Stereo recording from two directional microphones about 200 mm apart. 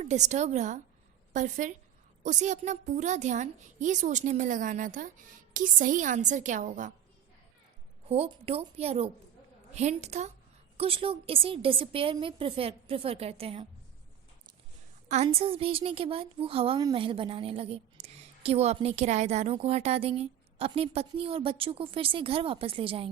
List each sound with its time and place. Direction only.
0.0 s a woman's voice: 35° right (ahead or behind)
8.0 s a woman's voice: 30° right (ahead or behind)
15.1 s a woman's voice: 30° right (ahead or behind)